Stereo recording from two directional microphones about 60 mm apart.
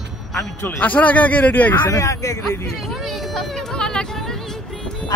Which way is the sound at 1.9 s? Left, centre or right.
Left.